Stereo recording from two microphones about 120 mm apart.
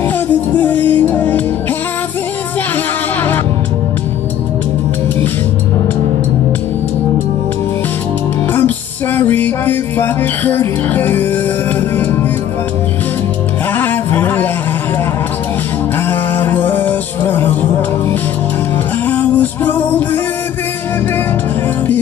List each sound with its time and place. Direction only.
0.6 s music: 15° left (ahead or behind)
8.5 s music: 15° left (ahead or behind)
13.7 s music: 15° left (ahead or behind)
16.1 s music: 15° left (ahead or behind)
19.0 s music: 15° left (ahead or behind)